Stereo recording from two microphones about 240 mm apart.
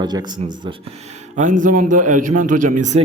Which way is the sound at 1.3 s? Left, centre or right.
Right.